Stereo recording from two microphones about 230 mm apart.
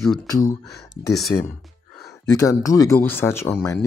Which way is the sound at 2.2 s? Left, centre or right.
Centre.